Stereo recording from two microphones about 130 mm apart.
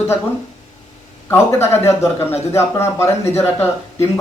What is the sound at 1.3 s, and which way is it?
A man's voice, 20° left (ahead or behind).